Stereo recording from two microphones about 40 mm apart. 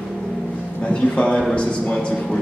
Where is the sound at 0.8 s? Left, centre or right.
Left.